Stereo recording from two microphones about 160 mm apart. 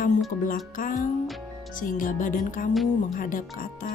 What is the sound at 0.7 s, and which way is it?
Speech, 60° left (ahead or behind).